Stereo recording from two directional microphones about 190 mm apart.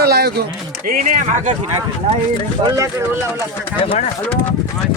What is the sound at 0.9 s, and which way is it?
Speech, 40° right (ahead or behind).